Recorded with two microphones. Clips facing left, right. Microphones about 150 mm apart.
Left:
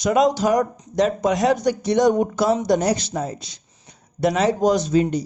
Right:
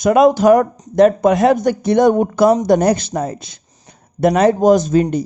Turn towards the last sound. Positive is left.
turn(degrees=-50)  # may be behind; listen again after turning